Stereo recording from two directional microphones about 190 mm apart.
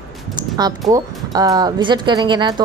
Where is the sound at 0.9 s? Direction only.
20° right (ahead or behind).